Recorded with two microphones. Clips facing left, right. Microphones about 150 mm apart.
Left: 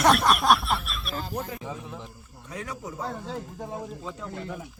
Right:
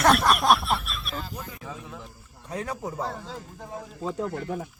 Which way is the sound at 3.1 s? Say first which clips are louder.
Left 4 dB; 5° left (ahead or behind).